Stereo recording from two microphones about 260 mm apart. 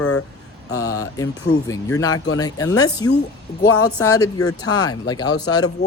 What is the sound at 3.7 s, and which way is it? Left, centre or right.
Speech, left.